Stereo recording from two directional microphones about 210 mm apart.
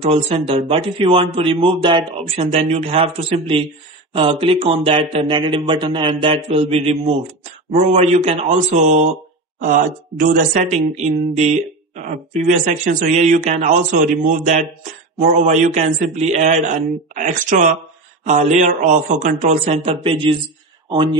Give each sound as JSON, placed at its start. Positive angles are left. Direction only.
{"t": 0.0, "sound": "speech", "side_deg": -30}